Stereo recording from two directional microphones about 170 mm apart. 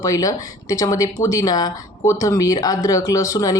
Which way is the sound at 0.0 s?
20° left (ahead or behind).